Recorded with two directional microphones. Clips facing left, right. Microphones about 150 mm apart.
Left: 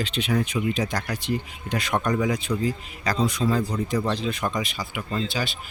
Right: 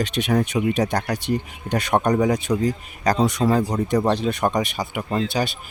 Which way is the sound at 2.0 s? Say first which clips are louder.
Right 5 dB; 40° right (ahead or behind).